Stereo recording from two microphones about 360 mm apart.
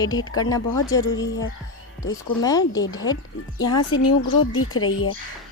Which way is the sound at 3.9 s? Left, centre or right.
Left.